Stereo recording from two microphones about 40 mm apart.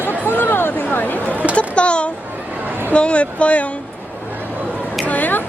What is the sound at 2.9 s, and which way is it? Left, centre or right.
Speech, left.